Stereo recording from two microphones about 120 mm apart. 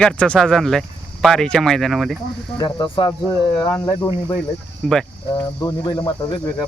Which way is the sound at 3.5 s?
35° left (ahead or behind).